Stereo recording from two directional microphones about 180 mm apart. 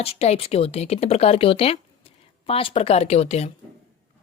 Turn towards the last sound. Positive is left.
turn(degrees=35)  # may be behind; listen again after turning